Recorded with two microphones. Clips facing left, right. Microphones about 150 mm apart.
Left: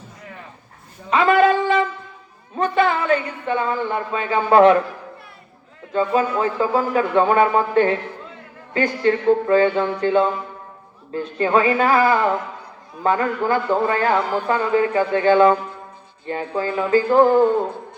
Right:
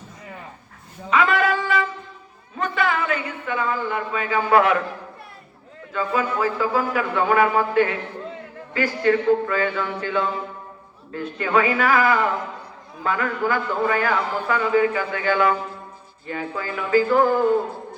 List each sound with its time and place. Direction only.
1.1 s a sound: 30° left (ahead or behind)
2.6 s speech: 30° left (ahead or behind)
5.9 s a man's voice: 30° left (ahead or behind)